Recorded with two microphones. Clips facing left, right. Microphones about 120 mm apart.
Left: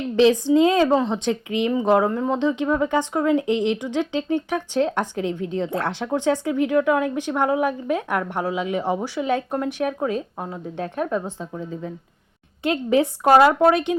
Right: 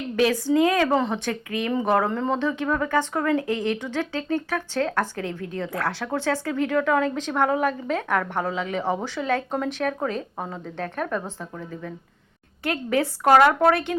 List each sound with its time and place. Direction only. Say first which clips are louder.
0.2 s a woman's voice: left 4 dB; 20° left (ahead or behind)
2.0 s a woman's voice: left 3 dB; 5° left (ahead or behind)